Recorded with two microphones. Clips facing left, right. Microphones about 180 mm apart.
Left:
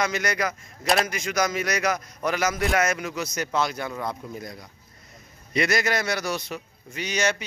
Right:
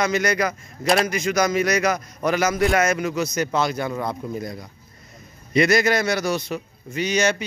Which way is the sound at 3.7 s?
20° right (ahead or behind).